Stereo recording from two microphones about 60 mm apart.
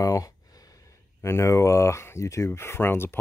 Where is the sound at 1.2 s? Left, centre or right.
Left.